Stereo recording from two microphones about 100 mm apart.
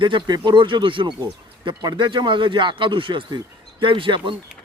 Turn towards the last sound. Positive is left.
turn(degrees=-55)  # may be behind; listen again after turning